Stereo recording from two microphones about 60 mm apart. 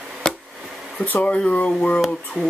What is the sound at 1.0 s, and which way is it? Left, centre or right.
Speech, left.